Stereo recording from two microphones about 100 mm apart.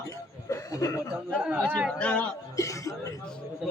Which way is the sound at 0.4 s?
30° left (ahead or behind).